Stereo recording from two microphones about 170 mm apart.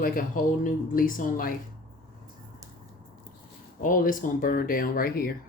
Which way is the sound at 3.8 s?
55° left (ahead or behind).